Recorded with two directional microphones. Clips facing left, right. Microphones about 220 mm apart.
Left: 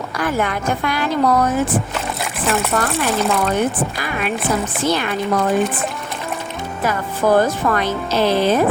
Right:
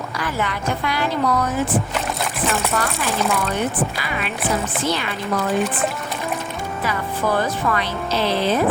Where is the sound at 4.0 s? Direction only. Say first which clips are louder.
Left 4 dB; 45° left (ahead or behind).